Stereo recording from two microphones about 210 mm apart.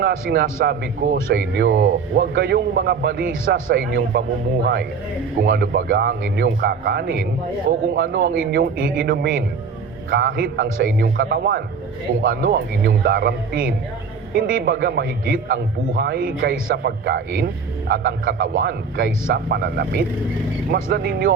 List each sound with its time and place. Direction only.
0.0 s a man's voice: 50° right (ahead or behind)
3.4 s a man's voice: 65° right (ahead or behind); by 21.3 s 45° right (ahead or behind)